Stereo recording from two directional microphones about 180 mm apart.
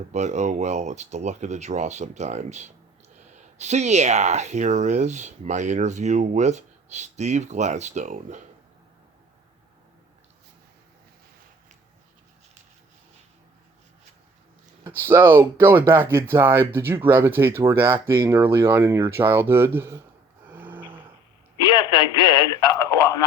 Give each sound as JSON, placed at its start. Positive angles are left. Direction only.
{"t": 0.1, "sound": "speech", "side_deg": -40}
{"t": 14.8, "sound": "speech", "side_deg": -15}
{"t": 20.5, "sound": "a sound", "side_deg": -10}
{"t": 21.6, "sound": "speech", "side_deg": 25}